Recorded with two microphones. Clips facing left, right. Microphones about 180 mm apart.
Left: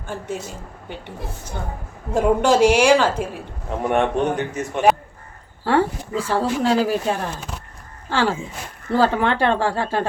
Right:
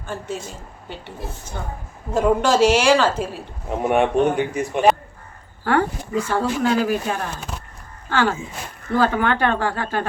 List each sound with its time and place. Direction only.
0.0 s a woman's voice: 15° left (ahead or behind)
3.8 s speech: 10° right (ahead or behind)
5.6 s speech: 30° left (ahead or behind)